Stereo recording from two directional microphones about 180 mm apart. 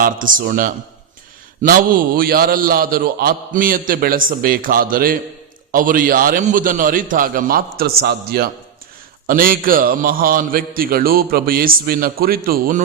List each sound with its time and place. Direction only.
0.0 s a man's voice: 50° right (ahead or behind)